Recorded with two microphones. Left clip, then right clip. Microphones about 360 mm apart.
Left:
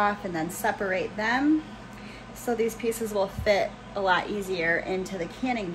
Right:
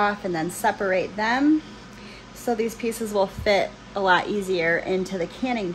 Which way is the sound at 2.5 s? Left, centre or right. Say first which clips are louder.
Right 2 dB; right.